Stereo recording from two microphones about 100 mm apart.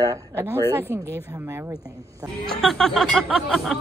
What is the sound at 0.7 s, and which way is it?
Speech, 25° right (ahead or behind).